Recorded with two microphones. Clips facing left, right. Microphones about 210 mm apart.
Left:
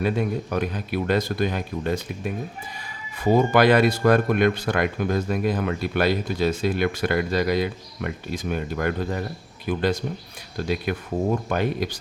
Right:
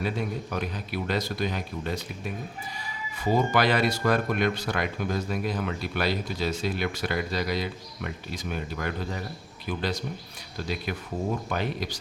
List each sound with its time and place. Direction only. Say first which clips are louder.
0.0 s speech: left 6 dB; 55° left (ahead or behind)
3.3 s speech: left 6 dB; 55° left (ahead or behind)